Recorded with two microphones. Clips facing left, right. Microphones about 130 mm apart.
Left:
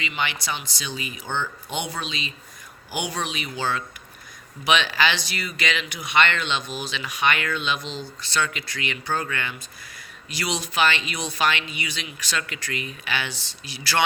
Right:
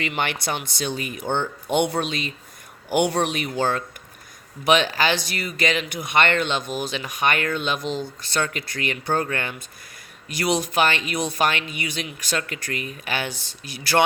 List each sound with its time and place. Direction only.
0.0 s speech: 55° right (ahead or behind)